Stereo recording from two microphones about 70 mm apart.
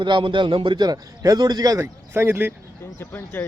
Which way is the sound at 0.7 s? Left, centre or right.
Right.